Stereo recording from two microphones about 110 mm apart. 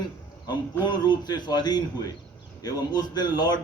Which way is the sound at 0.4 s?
40° left (ahead or behind).